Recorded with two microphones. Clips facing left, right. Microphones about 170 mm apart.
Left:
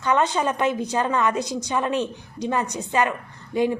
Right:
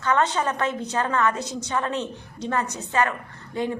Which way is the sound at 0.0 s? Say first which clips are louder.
Left 1 dB; 15° left (ahead or behind).